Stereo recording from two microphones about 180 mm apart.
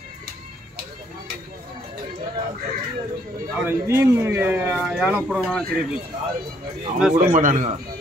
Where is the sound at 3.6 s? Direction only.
15° right (ahead or behind).